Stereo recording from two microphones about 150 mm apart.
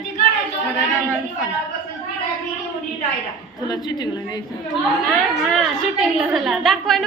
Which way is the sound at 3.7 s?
25° left (ahead or behind).